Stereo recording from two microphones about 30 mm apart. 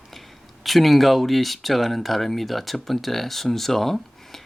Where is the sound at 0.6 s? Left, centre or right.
Centre.